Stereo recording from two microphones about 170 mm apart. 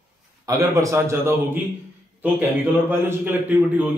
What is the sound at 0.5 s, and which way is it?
A man's voice, 20° right (ahead or behind).